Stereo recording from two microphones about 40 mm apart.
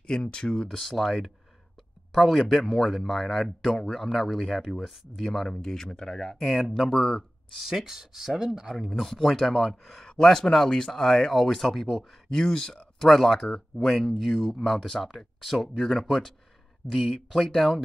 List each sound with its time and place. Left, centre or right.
0.0 s speech: left
0.7 s speech: centre
7.6 s speech: centre
10.0 s speech: centre
12.0 s speech: centre
13.0 s speech: centre